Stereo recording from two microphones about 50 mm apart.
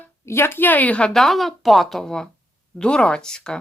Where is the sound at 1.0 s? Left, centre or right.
Centre.